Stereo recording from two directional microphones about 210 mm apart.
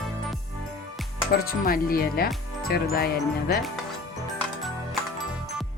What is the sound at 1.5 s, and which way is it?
Speech, 45° left (ahead or behind).